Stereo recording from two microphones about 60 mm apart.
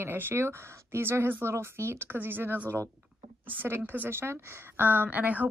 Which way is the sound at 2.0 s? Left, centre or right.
Right.